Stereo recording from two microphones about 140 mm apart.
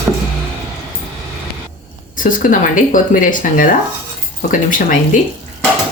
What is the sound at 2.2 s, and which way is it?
Speech, 70° left (ahead or behind).